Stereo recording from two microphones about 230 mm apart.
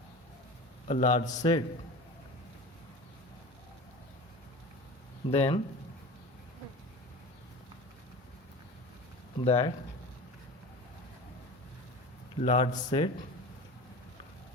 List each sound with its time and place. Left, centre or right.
0.9 s a man's voice: left
5.3 s a man's voice: left
9.4 s a man's voice: left
12.4 s a man's voice: left